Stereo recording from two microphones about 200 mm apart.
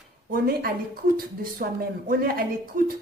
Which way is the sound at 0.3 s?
45° right (ahead or behind).